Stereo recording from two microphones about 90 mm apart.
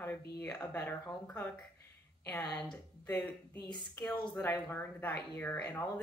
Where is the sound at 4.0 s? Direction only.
30° left (ahead or behind).